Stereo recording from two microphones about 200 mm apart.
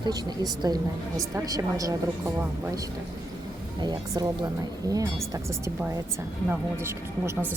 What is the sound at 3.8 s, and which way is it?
Speech, 20° right (ahead or behind).